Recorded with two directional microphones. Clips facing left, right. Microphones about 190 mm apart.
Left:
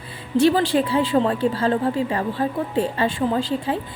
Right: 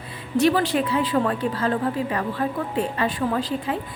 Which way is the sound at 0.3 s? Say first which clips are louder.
Left 2 dB; 30° left (ahead or behind).